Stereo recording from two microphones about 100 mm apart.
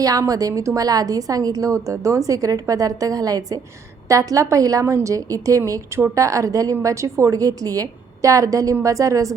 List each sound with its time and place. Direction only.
0.0 s a woman's voice: 35° right (ahead or behind)